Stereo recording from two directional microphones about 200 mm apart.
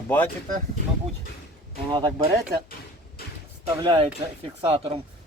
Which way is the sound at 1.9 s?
20° right (ahead or behind).